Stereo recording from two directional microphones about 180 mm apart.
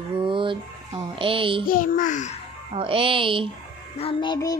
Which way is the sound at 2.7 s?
30° right (ahead or behind).